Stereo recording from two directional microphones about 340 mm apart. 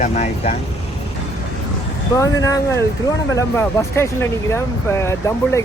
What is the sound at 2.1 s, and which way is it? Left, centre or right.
Speech, centre.